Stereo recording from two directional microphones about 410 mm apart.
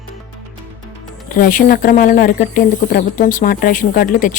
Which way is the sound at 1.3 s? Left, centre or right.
Centre.